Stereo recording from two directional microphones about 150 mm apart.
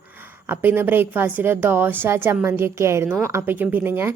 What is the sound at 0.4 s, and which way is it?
A woman's voice, 15° right (ahead or behind).